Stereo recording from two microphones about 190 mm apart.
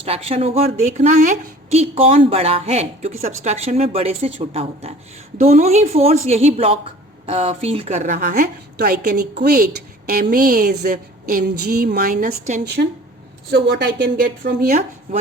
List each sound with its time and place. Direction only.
0.0 s a woman's voice: 30° right (ahead or behind)
13.5 s a woman's voice: 65° right (ahead or behind)